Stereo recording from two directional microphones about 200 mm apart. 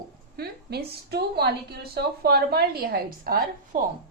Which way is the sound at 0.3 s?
50° right (ahead or behind).